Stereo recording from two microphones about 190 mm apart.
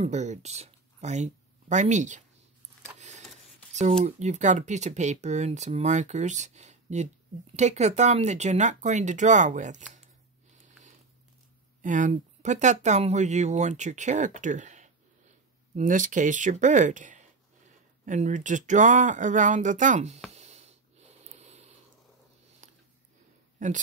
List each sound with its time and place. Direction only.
0.0 s speech: 35° right (ahead or behind)
2.8 s a sound: 35° right (ahead or behind)
4.0 s speech: 40° right (ahead or behind)
11.8 s speech: 40° right (ahead or behind)
20.3 s a sound: 35° right (ahead or behind)
23.6 s speech: 40° right (ahead or behind)